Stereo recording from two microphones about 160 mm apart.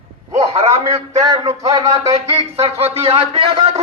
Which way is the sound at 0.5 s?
45° right (ahead or behind).